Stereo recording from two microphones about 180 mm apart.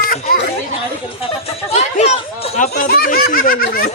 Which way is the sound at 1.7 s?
40° left (ahead or behind).